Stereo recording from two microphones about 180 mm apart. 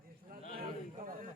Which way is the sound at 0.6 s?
50° right (ahead or behind).